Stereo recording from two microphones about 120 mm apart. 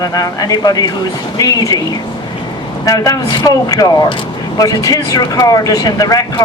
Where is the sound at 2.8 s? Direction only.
30° left (ahead or behind).